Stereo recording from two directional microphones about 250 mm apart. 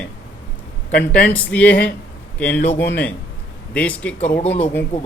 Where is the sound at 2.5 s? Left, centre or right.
Left.